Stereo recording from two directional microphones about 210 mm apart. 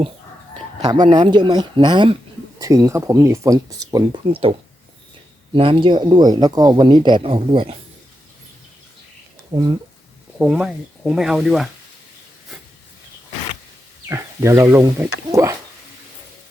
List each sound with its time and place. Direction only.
0.8 s speech: 20° right (ahead or behind)
5.5 s speech: 25° right (ahead or behind)
9.5 s speech: 20° right (ahead or behind)
10.3 s speech: 5° right (ahead or behind)
14.1 s speech: 15° right (ahead or behind)